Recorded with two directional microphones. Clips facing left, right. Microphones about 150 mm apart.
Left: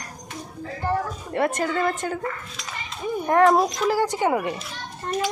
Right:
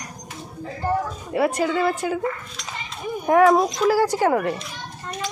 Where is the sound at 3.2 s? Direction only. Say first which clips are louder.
Right 2 dB; 10° right (ahead or behind).